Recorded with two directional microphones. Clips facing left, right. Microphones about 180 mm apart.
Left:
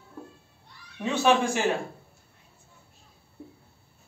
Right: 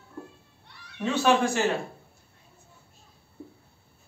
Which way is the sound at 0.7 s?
70° right (ahead or behind).